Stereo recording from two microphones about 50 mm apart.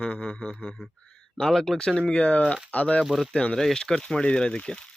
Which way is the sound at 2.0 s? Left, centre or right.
Left.